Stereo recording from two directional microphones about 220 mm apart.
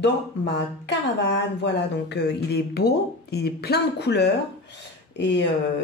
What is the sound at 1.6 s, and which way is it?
Speech, 50° left (ahead or behind).